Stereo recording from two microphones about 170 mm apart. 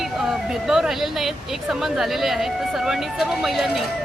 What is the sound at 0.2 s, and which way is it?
A woman's voice, 5° right (ahead or behind).